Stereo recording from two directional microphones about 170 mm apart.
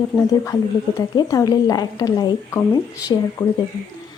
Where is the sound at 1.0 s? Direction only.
20° left (ahead or behind).